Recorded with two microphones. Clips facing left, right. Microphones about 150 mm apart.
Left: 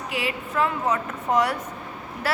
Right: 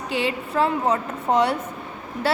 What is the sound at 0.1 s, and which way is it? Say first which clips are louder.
A woman's voice: right 5 dB; 30° right (ahead or behind).